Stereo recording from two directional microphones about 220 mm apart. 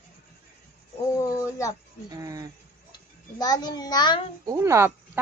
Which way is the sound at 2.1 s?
15° right (ahead or behind).